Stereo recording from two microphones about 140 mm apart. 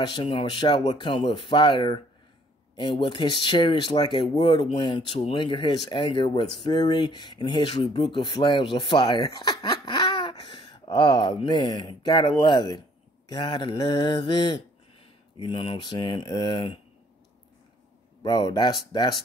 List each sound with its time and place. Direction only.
0.0 s speech: 35° left (ahead or behind)
18.2 s speech: 30° left (ahead or behind)